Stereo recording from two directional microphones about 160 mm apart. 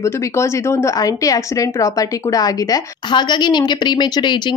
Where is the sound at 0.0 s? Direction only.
20° left (ahead or behind).